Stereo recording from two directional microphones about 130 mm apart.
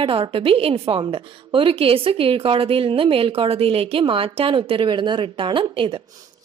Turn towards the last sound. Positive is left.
turn(degrees=-40)  # may be behind; listen again after turning